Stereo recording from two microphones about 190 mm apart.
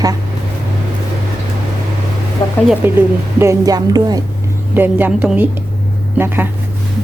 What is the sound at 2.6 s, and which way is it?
A woman's voice, 10° right (ahead or behind).